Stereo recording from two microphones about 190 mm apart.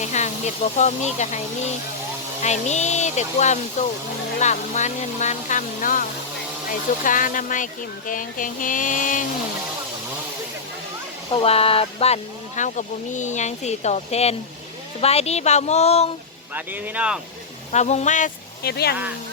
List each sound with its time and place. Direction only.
0.0 s speech: 40° left (ahead or behind)
2.4 s speech: 35° left (ahead or behind)
11.4 s speech: 30° left (ahead or behind)
16.6 s speech: 10° right (ahead or behind)
17.7 s speech: 35° left (ahead or behind)
18.6 s speech: 55° left (ahead or behind)